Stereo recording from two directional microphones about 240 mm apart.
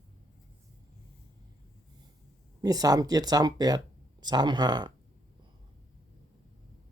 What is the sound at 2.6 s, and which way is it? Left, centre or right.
Speech, centre.